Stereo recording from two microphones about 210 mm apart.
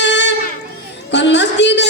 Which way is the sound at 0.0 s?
55° left (ahead or behind).